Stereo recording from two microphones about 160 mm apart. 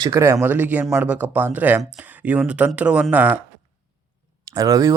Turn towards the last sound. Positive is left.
turn(degrees=-20)  # may be behind; listen again after turning